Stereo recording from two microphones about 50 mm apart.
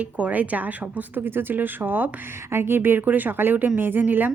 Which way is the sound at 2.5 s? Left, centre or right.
Right.